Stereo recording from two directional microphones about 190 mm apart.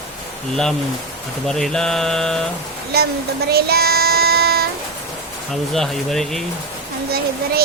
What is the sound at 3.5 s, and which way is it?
Child singing, 55° right (ahead or behind).